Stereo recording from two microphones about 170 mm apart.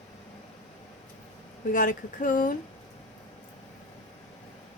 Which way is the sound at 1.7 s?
50° left (ahead or behind).